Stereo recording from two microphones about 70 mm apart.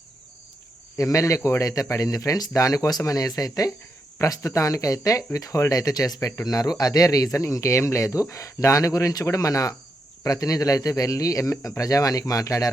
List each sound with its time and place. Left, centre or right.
0.9 s speech: left